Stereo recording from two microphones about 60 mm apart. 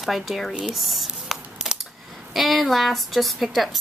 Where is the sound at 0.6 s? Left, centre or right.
Centre.